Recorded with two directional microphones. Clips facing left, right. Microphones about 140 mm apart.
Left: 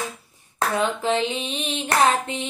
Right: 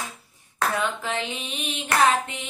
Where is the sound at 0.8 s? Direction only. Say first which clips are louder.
Left 6 dB; 25° left (ahead or behind).